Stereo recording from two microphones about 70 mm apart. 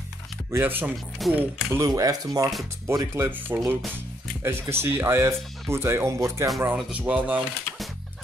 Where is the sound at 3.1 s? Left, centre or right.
Right.